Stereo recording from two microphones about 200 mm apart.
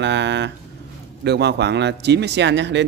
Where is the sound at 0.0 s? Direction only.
60° right (ahead or behind).